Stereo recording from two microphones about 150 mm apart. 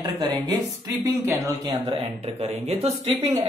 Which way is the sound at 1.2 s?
20° right (ahead or behind).